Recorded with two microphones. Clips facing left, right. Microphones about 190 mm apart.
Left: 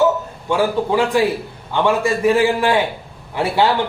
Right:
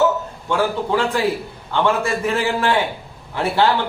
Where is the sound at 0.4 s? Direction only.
10° left (ahead or behind).